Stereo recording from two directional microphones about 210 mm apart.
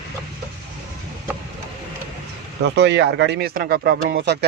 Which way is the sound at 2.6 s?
55° right (ahead or behind).